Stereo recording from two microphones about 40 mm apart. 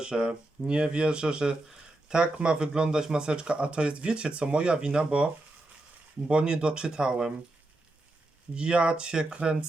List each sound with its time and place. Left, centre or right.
0.0 s speech: right
8.5 s speech: right